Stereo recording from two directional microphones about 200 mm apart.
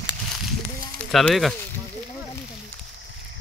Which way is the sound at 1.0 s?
5° left (ahead or behind).